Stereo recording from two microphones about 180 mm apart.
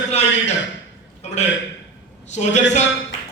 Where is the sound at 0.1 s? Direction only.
35° left (ahead or behind).